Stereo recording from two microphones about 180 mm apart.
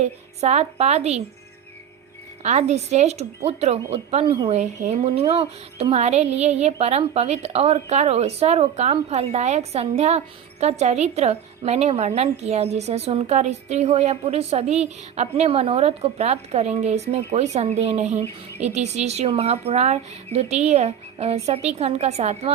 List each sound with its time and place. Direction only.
0.0 s a woman's voice: 35° right (ahead or behind)
2.4 s a woman's voice: 40° right (ahead or behind)